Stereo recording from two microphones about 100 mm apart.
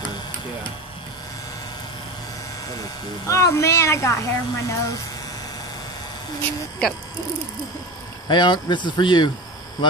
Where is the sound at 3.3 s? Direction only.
30° left (ahead or behind).